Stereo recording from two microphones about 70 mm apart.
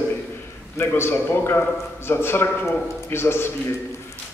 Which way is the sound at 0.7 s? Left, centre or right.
Left.